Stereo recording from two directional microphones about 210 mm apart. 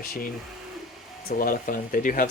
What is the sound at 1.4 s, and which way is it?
Speech, 40° left (ahead or behind).